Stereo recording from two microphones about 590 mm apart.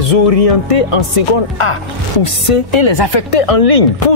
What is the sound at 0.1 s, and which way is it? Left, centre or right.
Speech, left.